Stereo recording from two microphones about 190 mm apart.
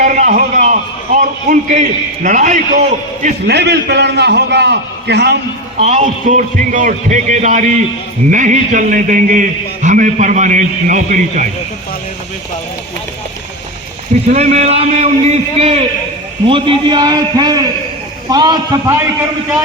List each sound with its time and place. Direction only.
0.0 s a sound: 45° right (ahead or behind)
2.2 s a man's voice: 40° right (ahead or behind)
3.4 s a man's voice: 60° right (ahead or behind)
5.8 s a man's voice: 35° right (ahead or behind)
14.3 s a man's voice: 35° right (ahead or behind); by 19.0 s 15° right (ahead or behind)